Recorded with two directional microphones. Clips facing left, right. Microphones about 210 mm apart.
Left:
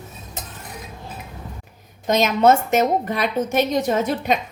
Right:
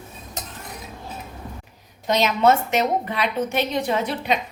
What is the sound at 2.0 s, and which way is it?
A woman's voice, 45° left (ahead or behind).